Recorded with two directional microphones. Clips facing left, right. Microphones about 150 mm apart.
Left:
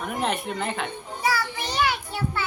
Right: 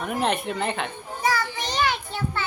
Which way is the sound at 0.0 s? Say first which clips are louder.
Right 2 dB; centre (ahead or behind).